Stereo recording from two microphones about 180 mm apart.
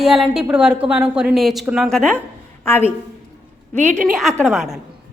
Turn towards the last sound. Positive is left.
turn(degrees=0)  # may be behind; listen again after turning